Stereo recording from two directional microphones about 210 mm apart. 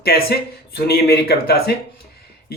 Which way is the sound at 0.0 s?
50° left (ahead or behind).